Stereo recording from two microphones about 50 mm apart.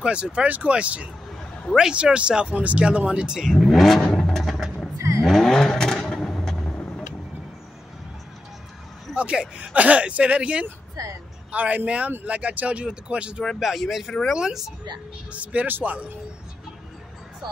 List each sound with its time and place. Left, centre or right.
0.0 s speech: right
1.8 s speech: centre
3.5 s vehicle: centre
4.9 s vehicle: right
5.2 s vehicle: centre
9.1 s a sound: right
9.6 s speech: right
13.6 s speech: centre
15.3 s speech: right